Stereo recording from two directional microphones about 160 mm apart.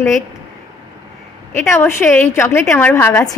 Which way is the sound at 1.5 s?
15° left (ahead or behind).